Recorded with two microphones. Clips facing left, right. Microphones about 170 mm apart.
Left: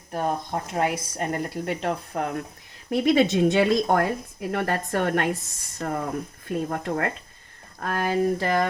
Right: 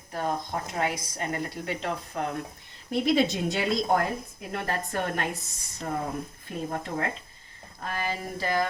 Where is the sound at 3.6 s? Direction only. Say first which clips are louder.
Left 4 dB; 70° left (ahead or behind).